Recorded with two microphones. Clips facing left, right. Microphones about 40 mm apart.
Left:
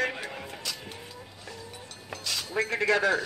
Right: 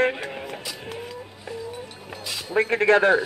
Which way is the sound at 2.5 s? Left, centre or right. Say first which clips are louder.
Right 8 dB; right.